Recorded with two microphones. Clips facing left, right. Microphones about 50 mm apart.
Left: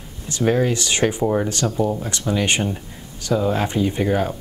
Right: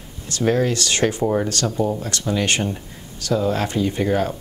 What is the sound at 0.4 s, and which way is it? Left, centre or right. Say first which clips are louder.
Speech: even; centre.